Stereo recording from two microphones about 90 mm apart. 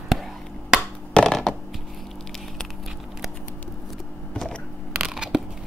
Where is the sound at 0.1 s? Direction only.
Centre (ahead or behind).